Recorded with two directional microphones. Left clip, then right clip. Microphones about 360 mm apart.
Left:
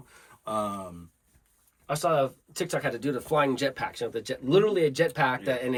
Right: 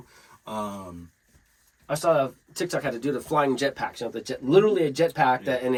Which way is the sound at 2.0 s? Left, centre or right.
Centre.